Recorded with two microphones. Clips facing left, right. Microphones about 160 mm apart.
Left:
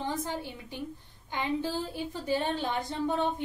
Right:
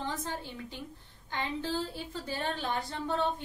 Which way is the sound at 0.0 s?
15° left (ahead or behind).